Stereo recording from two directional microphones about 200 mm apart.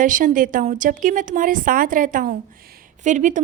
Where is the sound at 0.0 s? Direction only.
40° right (ahead or behind).